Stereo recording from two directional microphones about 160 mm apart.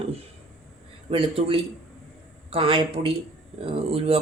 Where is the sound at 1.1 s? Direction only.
35° right (ahead or behind).